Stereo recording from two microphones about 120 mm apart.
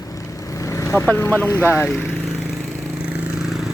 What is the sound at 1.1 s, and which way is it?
Speech, 15° left (ahead or behind).